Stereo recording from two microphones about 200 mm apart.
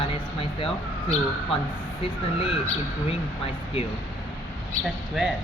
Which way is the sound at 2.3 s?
30° left (ahead or behind).